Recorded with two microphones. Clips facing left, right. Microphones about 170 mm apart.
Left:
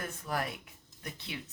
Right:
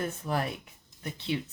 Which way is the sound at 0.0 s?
25° right (ahead or behind).